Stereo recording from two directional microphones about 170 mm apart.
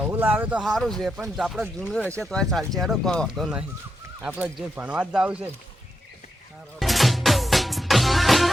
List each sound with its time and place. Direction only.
0.0 s speech: 10° right (ahead or behind)
6.7 s music: centre (ahead or behind)